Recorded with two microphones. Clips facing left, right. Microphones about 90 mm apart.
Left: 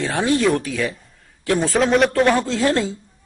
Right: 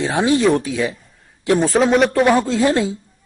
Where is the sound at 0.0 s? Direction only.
15° right (ahead or behind).